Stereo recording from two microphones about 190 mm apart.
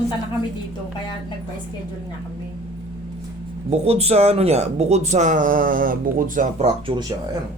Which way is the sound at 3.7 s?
35° right (ahead or behind).